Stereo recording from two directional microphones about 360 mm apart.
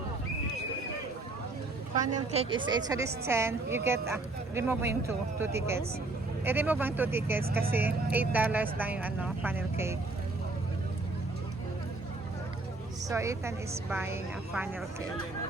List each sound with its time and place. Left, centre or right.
2.3 s speech: centre
13.1 s speech: centre